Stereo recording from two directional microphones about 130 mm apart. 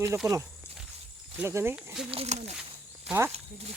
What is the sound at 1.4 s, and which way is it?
Speech, 20° right (ahead or behind).